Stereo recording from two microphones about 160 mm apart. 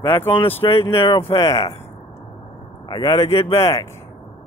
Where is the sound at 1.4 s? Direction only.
20° left (ahead or behind).